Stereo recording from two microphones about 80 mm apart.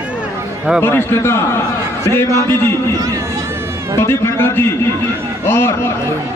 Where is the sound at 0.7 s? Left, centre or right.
Left.